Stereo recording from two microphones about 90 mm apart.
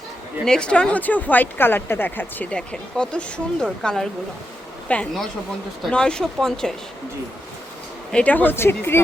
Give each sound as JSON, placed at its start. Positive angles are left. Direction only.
{"t": 0.4, "sound": "speech", "side_deg": 10}
{"t": 8.1, "sound": "speech", "side_deg": 15}